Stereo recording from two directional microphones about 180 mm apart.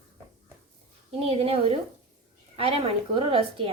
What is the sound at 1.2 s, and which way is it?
A woman's voice, 35° right (ahead or behind).